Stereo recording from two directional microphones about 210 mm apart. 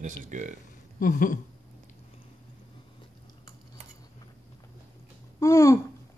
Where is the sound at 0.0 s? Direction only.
35° right (ahead or behind).